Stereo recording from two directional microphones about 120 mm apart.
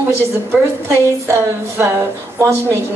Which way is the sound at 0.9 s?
20° right (ahead or behind).